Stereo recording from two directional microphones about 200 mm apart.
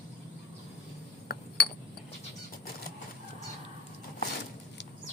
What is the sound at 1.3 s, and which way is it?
Glass, 50° left (ahead or behind).